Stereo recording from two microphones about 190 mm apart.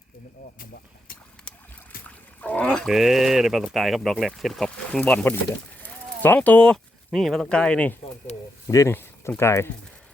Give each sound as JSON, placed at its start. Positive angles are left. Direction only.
{"t": 0.6, "sound": "speech", "side_deg": 50}
{"t": 2.0, "sound": "speech", "side_deg": 5}